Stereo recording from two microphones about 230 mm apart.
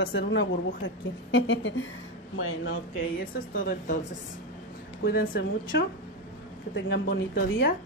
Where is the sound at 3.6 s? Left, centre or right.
Left.